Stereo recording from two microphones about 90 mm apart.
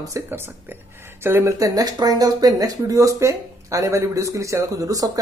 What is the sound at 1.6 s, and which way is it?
Speech, 45° right (ahead or behind).